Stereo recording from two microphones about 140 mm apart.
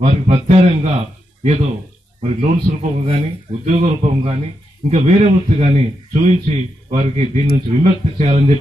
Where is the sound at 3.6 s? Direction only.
50° right (ahead or behind).